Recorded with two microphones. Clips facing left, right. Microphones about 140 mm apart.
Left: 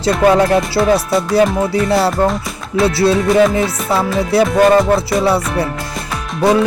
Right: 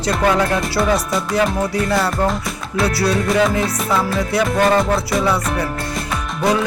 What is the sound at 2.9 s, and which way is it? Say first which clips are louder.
Speech: left 5 dB; 25° left (ahead or behind).